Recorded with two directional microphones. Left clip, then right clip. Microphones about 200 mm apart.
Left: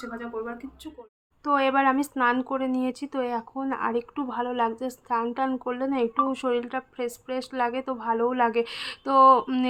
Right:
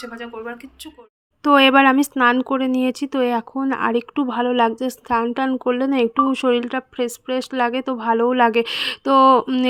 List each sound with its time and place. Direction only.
0.0 s speech: centre (ahead or behind)
1.5 s speech: 40° right (ahead or behind)